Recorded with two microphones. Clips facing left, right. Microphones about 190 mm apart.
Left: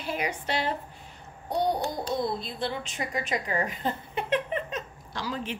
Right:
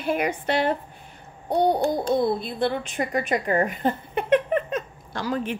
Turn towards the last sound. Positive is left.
turn(degrees=-50)  # may be behind; listen again after turning